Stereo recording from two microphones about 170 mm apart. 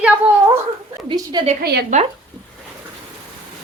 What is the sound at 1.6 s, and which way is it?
Speech, 65° right (ahead or behind).